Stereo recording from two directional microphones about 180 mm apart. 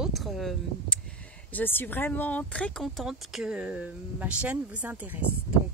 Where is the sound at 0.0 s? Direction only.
Centre (ahead or behind).